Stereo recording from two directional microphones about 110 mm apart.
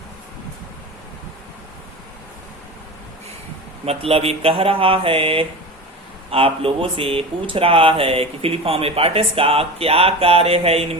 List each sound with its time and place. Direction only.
3.8 s speech: 65° right (ahead or behind)